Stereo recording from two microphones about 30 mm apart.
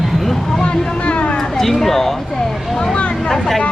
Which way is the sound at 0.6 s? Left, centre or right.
Left.